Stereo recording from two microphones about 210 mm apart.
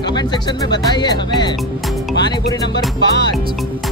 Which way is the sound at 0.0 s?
20° left (ahead or behind).